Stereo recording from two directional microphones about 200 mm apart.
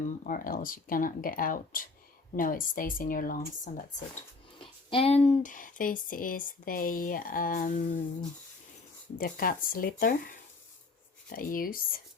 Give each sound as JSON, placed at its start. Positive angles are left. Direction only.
{"t": 0.0, "sound": "speech", "side_deg": 45}
{"t": 4.5, "sound": "speech", "side_deg": 25}
{"t": 9.1, "sound": "speech", "side_deg": 45}